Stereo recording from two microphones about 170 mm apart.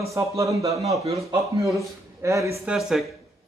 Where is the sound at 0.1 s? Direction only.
20° right (ahead or behind).